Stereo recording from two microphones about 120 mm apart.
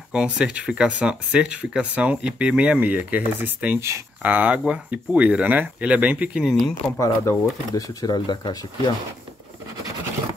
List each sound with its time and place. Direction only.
0.1 s speech: 10° right (ahead or behind)
7.0 s speech: 30° left (ahead or behind)